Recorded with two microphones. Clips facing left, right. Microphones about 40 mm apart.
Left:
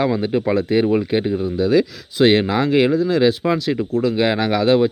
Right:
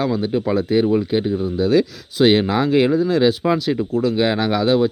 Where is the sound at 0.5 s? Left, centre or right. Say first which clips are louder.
Right 1 dB; centre.